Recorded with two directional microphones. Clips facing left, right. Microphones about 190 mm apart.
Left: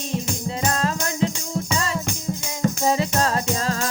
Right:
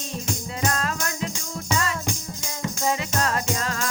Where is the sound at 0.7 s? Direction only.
30° left (ahead or behind).